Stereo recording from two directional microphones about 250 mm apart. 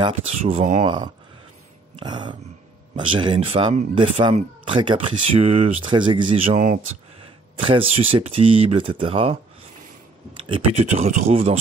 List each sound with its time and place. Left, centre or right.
0.4 s speech: right
0.8 s speech: centre
7.6 s speech: right
10.5 s speech: right